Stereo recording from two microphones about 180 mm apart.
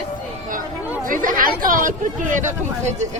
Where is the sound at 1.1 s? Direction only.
50° right (ahead or behind).